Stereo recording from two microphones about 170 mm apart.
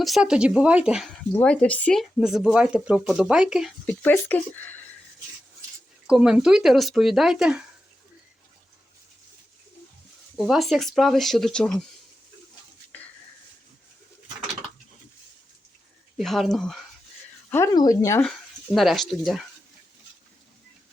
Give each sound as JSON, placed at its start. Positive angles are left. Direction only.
{"t": 0.0, "sound": "speech", "side_deg": 0}
{"t": 1.4, "sound": "speech", "side_deg": 10}
{"t": 4.0, "sound": "speech", "side_deg": 10}
{"t": 6.1, "sound": "speech", "side_deg": -5}
{"t": 10.3, "sound": "speech", "side_deg": 0}
{"t": 16.1, "sound": "speech", "side_deg": 0}
{"t": 17.5, "sound": "speech", "side_deg": 20}
{"t": 18.2, "sound": "speech", "side_deg": 0}